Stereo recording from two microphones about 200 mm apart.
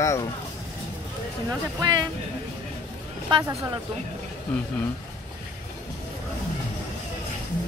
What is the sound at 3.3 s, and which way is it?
Speech, 20° right (ahead or behind).